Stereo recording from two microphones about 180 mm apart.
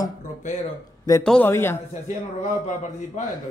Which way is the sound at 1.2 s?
5° left (ahead or behind).